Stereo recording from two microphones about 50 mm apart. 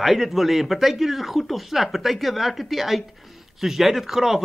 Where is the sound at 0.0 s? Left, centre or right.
Centre.